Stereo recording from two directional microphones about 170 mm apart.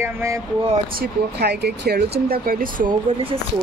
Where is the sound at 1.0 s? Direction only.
70° right (ahead or behind).